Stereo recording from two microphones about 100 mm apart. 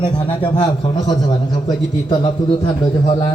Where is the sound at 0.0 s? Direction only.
50° left (ahead or behind).